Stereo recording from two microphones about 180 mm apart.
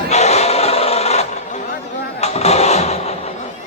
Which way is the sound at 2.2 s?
35° left (ahead or behind).